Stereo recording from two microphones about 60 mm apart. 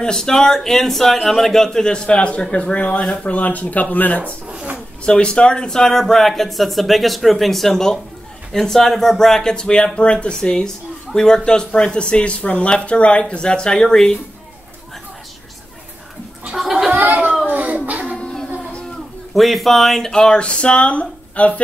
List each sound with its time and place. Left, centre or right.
0.0 s speech: centre; by 4.2 s left
4.7 s speech: centre
16.5 s gargling: centre
16.9 s a sound: right
18.2 s music: centre
19.3 s speech: centre; by 21.5 s left